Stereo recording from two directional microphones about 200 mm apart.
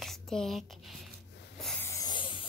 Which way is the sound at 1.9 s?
20° left (ahead or behind).